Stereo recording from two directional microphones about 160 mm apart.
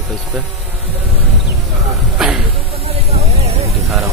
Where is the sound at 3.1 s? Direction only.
40° right (ahead or behind).